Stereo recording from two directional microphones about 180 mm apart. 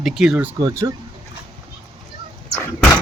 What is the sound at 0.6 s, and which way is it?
Speech, 15° right (ahead or behind).